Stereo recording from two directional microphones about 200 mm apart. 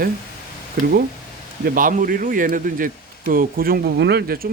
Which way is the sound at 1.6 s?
45° right (ahead or behind).